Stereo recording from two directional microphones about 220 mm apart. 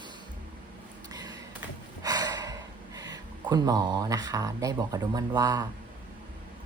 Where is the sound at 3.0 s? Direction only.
15° right (ahead or behind).